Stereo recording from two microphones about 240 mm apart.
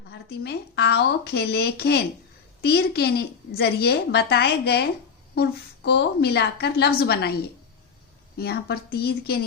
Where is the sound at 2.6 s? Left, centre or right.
Left.